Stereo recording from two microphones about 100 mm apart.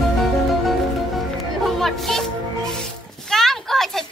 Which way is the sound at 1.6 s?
Centre (ahead or behind).